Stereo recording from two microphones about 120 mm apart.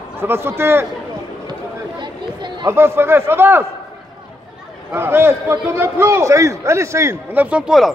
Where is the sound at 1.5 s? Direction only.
40° right (ahead or behind).